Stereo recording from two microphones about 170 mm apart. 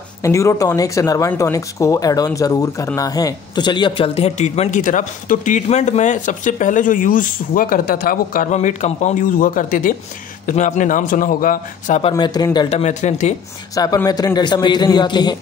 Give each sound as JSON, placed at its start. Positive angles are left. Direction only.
{"t": 0.2, "sound": "speech", "side_deg": 20}
{"t": 12.1, "sound": "speech", "side_deg": 25}
{"t": 12.6, "sound": "speech", "side_deg": 40}
{"t": 13.7, "sound": "speech", "side_deg": 20}